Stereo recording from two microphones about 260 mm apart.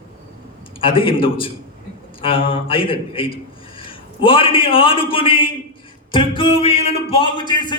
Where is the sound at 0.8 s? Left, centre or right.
Centre.